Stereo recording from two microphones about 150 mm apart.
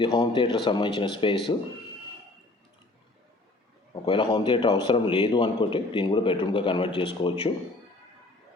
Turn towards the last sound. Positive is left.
turn(degrees=35)  # may be behind; listen again after turning